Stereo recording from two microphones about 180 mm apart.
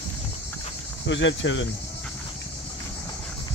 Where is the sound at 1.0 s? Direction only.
90° left.